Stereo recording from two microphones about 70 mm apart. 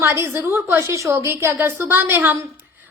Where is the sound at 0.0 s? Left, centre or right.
Right.